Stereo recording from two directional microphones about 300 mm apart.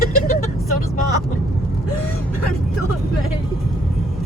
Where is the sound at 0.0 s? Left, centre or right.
Left.